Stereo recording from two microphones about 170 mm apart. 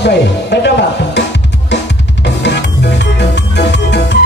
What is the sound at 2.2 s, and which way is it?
Drum kit, 90° left.